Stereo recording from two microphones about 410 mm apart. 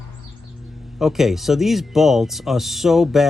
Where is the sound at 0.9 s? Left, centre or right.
Centre.